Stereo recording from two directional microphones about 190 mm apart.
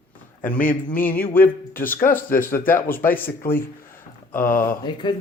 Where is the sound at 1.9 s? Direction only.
45° left (ahead or behind).